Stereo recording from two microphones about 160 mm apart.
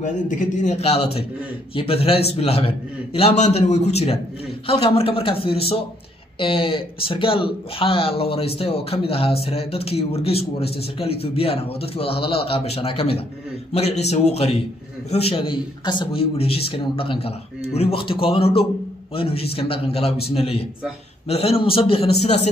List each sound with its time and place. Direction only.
0.0 s a man's voice: 50° left (ahead or behind)